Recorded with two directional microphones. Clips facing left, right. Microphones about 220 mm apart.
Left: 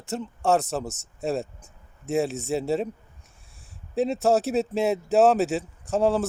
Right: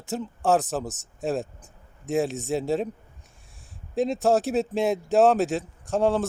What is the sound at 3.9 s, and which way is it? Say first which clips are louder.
Speech: even; centre (ahead or behind).